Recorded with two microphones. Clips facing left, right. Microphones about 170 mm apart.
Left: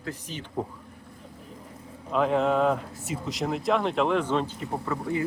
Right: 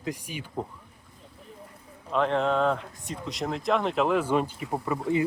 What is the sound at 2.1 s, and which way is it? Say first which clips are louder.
Speech: left 1 dB; 5° left (ahead or behind).